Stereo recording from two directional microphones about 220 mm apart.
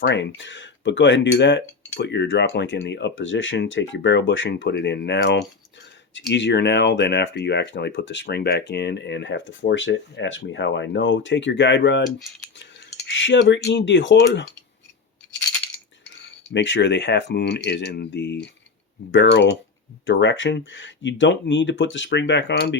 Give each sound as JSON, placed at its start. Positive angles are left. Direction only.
{"t": 0.0, "sound": "speech", "side_deg": 55}
{"t": 13.1, "sound": "speech", "side_deg": 55}
{"t": 16.5, "sound": "speech", "side_deg": 55}